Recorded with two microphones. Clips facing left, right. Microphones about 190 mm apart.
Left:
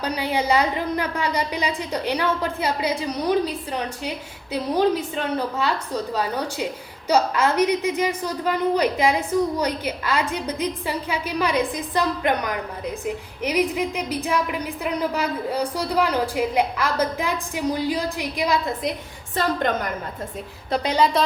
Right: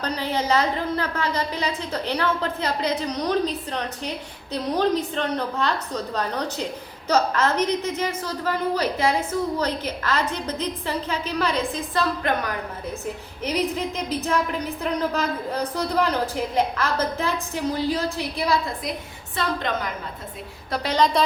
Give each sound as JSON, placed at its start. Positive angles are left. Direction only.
{"t": 0.0, "sound": "a woman's voice", "side_deg": 10}
{"t": 19.4, "sound": "a woman's voice", "side_deg": 50}
{"t": 20.8, "sound": "a woman's voice", "side_deg": 10}